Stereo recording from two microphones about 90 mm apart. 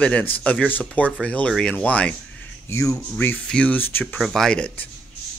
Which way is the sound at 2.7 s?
35° left (ahead or behind).